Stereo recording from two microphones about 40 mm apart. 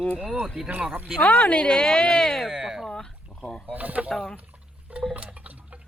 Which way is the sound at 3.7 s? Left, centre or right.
Right.